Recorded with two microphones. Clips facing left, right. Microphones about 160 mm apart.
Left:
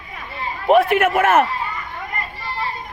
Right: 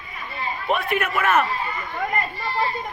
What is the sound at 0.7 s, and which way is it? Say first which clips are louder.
Speech: left 10 dB; 85° left.